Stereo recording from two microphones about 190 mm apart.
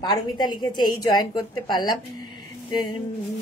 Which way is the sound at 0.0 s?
20° left (ahead or behind).